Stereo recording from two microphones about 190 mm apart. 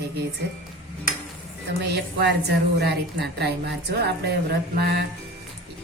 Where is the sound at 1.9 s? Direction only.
60° right (ahead or behind).